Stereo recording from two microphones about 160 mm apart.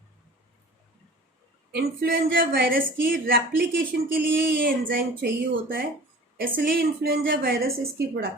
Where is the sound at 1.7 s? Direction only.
65° right (ahead or behind); by 8.2 s 80° right.